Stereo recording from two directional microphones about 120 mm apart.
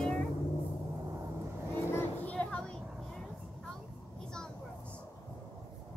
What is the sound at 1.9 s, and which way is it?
Children playing, 15° left (ahead or behind).